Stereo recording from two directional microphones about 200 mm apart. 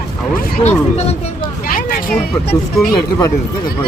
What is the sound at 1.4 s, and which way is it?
Hubbub, 45° left (ahead or behind).